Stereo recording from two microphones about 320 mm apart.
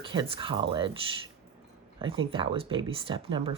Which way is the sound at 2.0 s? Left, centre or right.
Centre.